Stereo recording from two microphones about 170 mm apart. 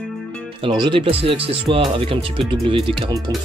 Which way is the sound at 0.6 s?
30° right (ahead or behind).